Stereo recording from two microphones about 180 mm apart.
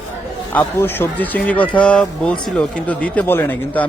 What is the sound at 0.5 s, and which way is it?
Speech, 10° left (ahead or behind).